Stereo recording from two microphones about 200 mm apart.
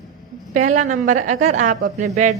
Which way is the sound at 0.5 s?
40° right (ahead or behind).